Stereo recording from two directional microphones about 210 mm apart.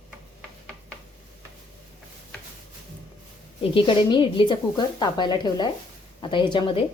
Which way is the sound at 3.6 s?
25° left (ahead or behind).